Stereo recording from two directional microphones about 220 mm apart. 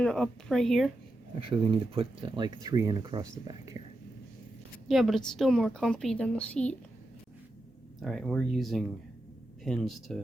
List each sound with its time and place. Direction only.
0.0 s a woman's voice: centre (ahead or behind)
1.4 s speech: 25° right (ahead or behind)
4.9 s a woman's voice: centre (ahead or behind)
8.0 s a woman's voice: centre (ahead or behind)